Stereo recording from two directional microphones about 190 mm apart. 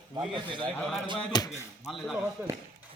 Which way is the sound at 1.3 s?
20° left (ahead or behind).